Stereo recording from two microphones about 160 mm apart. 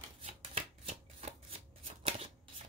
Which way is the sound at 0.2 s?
40° right (ahead or behind).